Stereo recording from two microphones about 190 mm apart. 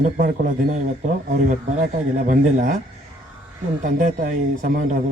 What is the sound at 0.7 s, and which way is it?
Speech, 45° right (ahead or behind).